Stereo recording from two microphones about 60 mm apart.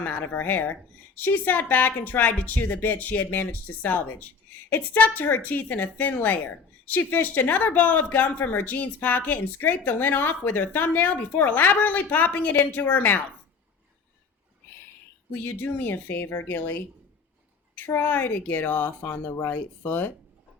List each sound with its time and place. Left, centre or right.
0.0 s a woman's voice: left
15.3 s a woman's voice: left